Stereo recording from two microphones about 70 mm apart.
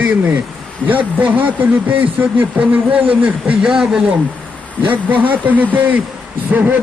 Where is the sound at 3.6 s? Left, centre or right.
Centre.